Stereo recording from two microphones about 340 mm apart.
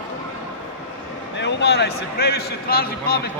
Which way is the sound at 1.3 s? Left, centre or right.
Left.